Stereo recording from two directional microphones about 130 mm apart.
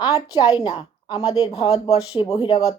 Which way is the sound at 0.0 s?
30° left (ahead or behind).